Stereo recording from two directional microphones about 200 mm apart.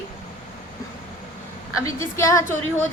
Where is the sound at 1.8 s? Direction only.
15° left (ahead or behind).